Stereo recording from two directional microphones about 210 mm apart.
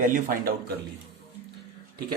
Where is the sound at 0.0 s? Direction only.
40° right (ahead or behind).